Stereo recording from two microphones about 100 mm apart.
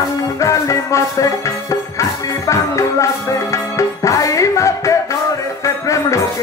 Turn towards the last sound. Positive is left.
turn(degrees=30)  # may be behind; listen again after turning